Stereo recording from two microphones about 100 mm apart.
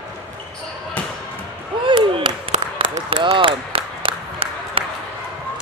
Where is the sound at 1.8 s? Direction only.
55° right (ahead or behind).